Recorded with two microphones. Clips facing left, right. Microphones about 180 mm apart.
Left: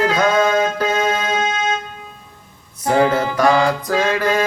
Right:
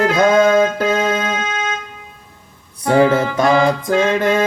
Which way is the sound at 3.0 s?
25° right (ahead or behind).